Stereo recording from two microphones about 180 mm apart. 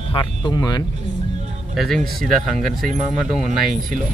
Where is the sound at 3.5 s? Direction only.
45° right (ahead or behind).